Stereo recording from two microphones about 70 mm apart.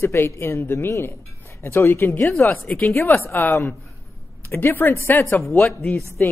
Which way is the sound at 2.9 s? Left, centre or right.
Left.